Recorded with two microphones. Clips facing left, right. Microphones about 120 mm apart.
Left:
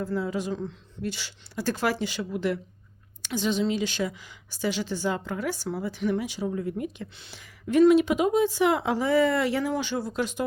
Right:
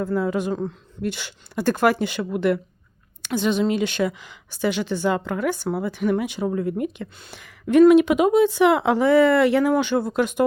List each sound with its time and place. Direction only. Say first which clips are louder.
0.0 s speech: right 6 dB; 55° right (ahead or behind)
1.0 s speech: right 5 dB; 60° right (ahead or behind)